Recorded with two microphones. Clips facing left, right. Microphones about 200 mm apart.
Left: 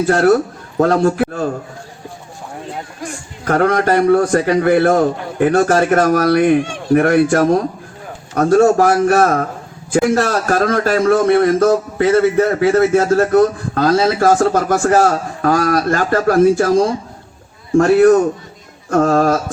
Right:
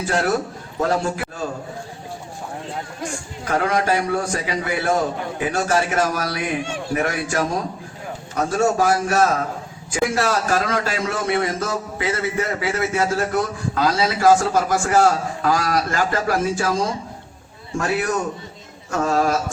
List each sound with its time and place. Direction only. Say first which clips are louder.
0.0 s a man's voice: left 9 dB; 60° left (ahead or behind)
3.4 s a man's voice: left 6 dB; 55° left (ahead or behind)